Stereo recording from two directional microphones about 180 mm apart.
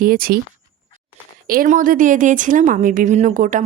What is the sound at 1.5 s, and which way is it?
Speech, 50° right (ahead or behind).